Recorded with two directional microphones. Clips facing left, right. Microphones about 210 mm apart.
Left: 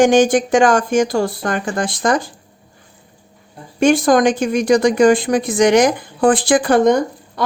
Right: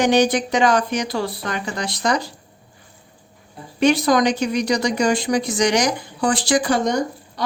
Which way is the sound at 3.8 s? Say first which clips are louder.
Left 4 dB; 50° left (ahead or behind).